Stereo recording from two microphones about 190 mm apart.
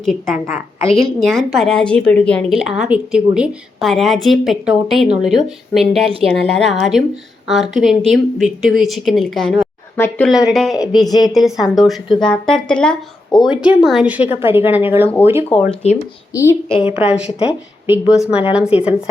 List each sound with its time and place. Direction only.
0.0 s speech: centre (ahead or behind)
0.3 s a woman's voice: 10° right (ahead or behind)
1.2 s speech: centre (ahead or behind)
11.0 s a woman's voice: 20° left (ahead or behind)
11.3 s a woman's voice: centre (ahead or behind)
15.8 s speech: 35° left (ahead or behind)
16.3 s speech: 15° left (ahead or behind)
16.9 s a woman's voice: 5° right (ahead or behind)